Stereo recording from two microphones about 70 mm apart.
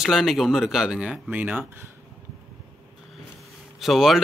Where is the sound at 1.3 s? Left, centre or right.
Right.